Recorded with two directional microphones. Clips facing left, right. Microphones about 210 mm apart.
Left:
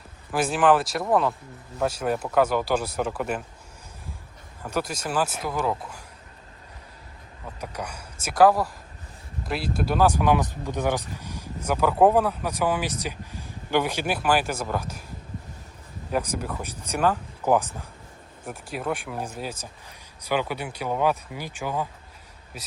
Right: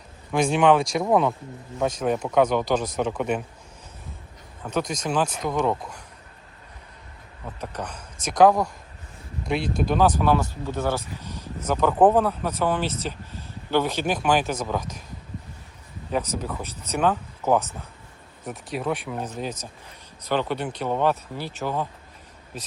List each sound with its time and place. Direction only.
0.3 s speech: 5° left (ahead or behind)
4.6 s speech: 5° left (ahead or behind)
7.6 s speech: 10° left (ahead or behind)
16.1 s speech: 10° left (ahead or behind)